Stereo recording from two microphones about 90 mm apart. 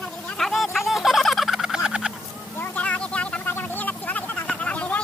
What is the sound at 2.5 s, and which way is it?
Vehicle, 20° left (ahead or behind).